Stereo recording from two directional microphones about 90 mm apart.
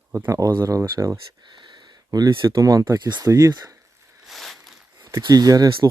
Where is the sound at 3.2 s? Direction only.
35° right (ahead or behind).